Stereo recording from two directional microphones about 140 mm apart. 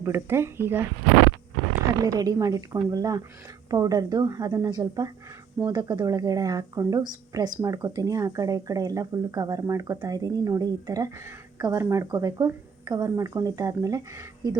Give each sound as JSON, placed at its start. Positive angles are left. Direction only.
{"t": 0.0, "sound": "speech", "side_deg": -15}
{"t": 2.0, "sound": "speech", "side_deg": -25}